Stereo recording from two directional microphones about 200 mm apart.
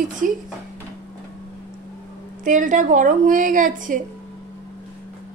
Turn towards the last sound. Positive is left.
turn(degrees=-40)  # may be behind; listen again after turning